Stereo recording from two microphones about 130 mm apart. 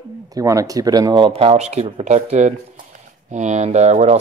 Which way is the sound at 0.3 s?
25° right (ahead or behind).